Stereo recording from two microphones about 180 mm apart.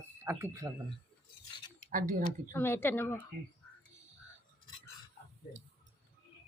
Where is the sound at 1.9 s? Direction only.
50° right (ahead or behind).